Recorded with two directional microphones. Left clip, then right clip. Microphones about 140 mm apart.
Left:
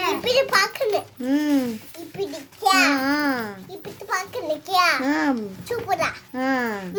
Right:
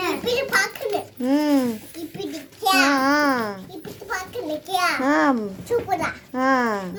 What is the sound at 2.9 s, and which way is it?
Speech, 10° left (ahead or behind).